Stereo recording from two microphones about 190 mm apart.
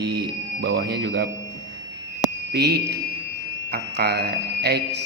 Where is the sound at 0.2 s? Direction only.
65° right (ahead or behind).